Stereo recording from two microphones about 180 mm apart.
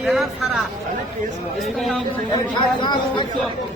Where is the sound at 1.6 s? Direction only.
Centre (ahead or behind).